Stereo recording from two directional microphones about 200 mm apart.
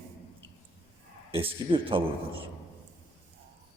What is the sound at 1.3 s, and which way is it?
A man's voice, 25° right (ahead or behind).